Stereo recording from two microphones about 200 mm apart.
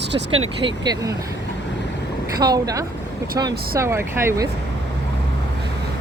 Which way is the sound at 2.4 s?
20° right (ahead or behind).